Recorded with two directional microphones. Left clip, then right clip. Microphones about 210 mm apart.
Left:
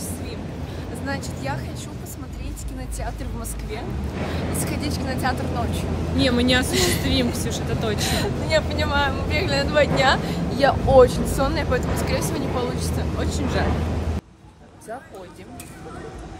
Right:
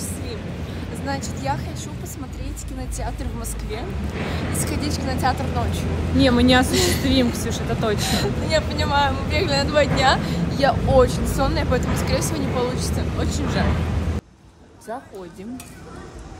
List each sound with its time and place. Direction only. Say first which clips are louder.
1.0 s speech: right 3 dB; 10° left (ahead or behind)
4.6 s speech: right 1 dB; 10° left (ahead or behind)
6.1 s speech: right 3 dB; 25° right (ahead or behind)
6.7 s a woman's voice: right 1 dB; 20° left (ahead or behind)
7.1 s speech: right 2 dB; 25° right (ahead or behind)
8.0 s speech: right 1 dB; 15° left (ahead or behind)